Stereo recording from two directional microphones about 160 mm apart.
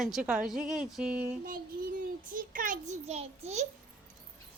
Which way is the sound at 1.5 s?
60° right (ahead or behind).